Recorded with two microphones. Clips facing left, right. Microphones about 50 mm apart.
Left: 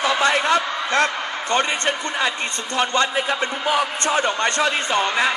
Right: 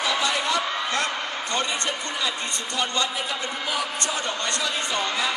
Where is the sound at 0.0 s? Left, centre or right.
Left.